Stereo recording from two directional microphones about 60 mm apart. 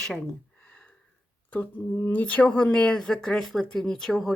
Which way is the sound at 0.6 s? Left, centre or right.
Centre.